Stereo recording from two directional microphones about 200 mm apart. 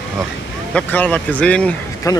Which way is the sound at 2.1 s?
15° left (ahead or behind).